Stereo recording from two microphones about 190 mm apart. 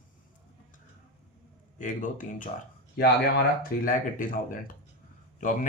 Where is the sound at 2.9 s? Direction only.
55° left (ahead or behind).